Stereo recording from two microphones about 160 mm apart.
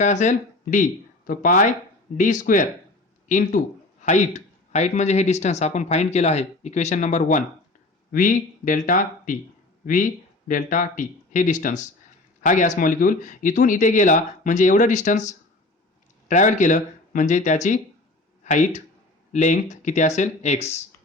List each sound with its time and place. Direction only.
0.0 s speech: 50° left (ahead or behind)